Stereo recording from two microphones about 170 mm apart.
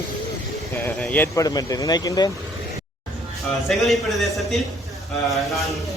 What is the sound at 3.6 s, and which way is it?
A man's voice, centre (ahead or behind).